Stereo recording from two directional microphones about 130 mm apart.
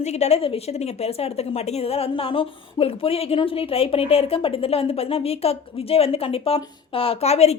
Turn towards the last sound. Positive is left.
turn(degrees=55)  # may be behind; listen again after turning